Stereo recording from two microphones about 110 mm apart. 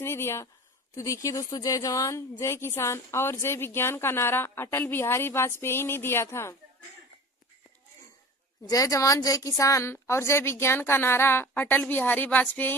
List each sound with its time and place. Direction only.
0.0 s a woman's voice: 25° left (ahead or behind)
8.6 s a woman's voice: 35° left (ahead or behind); by 12.7 s 15° left (ahead or behind)